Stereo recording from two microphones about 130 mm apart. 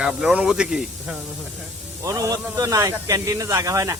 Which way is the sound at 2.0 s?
25° right (ahead or behind).